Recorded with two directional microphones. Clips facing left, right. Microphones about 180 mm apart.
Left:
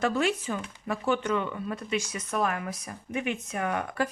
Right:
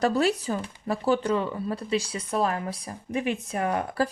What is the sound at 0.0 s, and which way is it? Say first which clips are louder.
Speech: right 3 dB; 35° right (ahead or behind).